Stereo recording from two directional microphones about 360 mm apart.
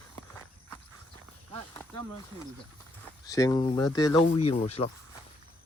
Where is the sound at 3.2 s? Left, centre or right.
Centre.